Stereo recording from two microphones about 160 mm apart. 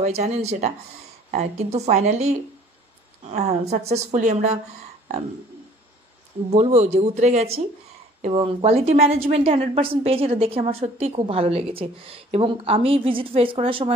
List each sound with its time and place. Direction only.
0.0 s speech: 45° right (ahead or behind)
6.5 s speech: 45° right (ahead or behind)
8.2 s a woman's voice: 35° right (ahead or behind)